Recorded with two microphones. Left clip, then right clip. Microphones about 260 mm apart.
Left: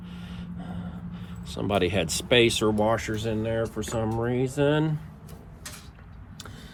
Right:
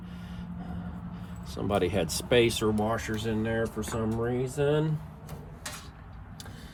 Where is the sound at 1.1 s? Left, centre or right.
Centre.